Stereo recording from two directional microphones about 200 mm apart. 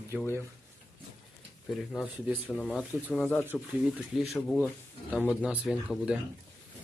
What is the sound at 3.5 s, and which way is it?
Speech, 5° right (ahead or behind).